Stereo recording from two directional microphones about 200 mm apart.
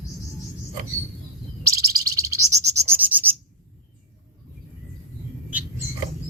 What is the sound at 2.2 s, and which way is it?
Bird, 15° right (ahead or behind).